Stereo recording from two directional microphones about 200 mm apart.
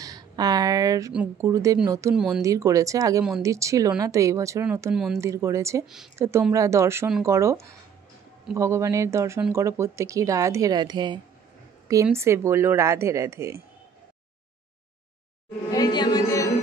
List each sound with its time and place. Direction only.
0.0 s speech: 20° right (ahead or behind)
2.1 s speech: 5° right (ahead or behind)
2.4 s speech: 15° right (ahead or behind)
4.9 s speech: centre (ahead or behind)
5.2 s speech: 15° right (ahead or behind)
15.7 s music: 20° left (ahead or behind)